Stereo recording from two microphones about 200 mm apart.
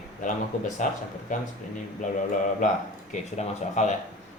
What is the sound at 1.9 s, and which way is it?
Speech, 40° left (ahead or behind).